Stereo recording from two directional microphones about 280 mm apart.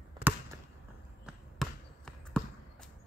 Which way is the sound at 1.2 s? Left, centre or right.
Centre.